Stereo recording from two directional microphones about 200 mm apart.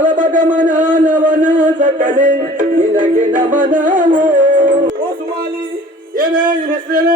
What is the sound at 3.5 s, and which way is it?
Music, 40° right (ahead or behind).